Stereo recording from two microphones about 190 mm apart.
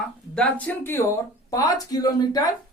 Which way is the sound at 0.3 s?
5° left (ahead or behind).